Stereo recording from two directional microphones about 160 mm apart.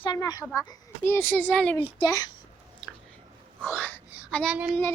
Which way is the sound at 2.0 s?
20° left (ahead or behind).